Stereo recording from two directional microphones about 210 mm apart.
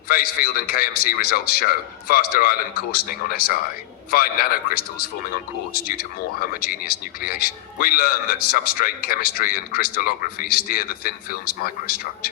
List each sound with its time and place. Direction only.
0.1 s a man's voice: 45° left (ahead or behind)